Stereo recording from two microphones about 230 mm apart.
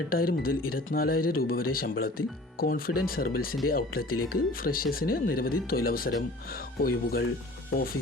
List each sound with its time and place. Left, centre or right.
0.1 s speech: left